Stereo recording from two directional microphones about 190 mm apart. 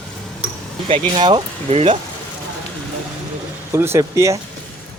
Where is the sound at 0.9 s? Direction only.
25° right (ahead or behind).